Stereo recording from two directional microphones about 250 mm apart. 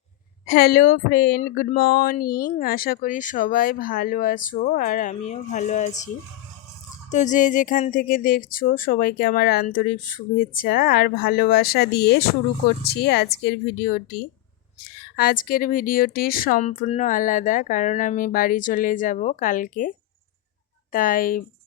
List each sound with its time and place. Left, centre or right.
0.4 s speech: left
7.1 s speech: left
20.9 s speech: left